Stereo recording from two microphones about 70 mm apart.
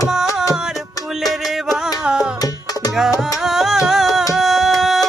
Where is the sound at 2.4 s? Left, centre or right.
Left.